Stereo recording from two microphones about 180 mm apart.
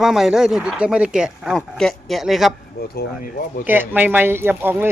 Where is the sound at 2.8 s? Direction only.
55° left (ahead or behind).